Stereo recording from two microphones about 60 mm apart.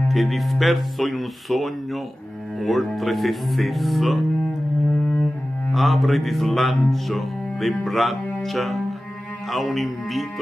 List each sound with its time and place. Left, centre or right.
0.1 s music: centre
4.9 s cello: left
5.7 s music: centre